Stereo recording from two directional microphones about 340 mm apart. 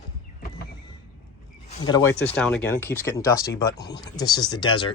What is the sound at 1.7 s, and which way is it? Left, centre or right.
Speech, centre.